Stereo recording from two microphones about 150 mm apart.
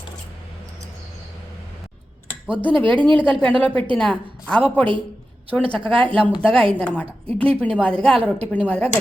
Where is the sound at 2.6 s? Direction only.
10° left (ahead or behind).